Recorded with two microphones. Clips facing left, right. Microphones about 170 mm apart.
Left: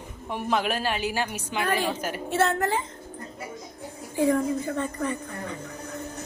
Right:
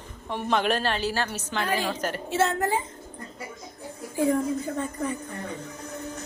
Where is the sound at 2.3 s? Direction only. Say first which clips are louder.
Left 1 dB; 60° left (ahead or behind).